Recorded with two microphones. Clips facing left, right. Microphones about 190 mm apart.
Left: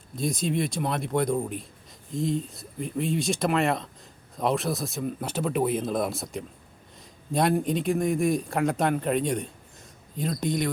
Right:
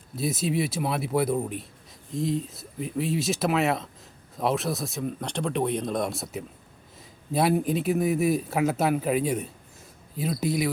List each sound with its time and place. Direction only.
0.2 s speech: 5° right (ahead or behind)